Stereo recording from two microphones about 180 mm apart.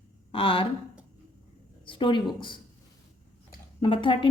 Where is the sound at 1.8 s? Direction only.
25° left (ahead or behind).